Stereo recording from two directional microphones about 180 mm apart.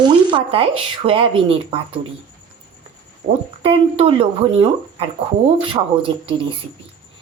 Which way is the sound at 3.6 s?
30° right (ahead or behind).